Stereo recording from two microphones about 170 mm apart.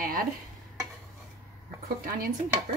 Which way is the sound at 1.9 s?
55° right (ahead or behind).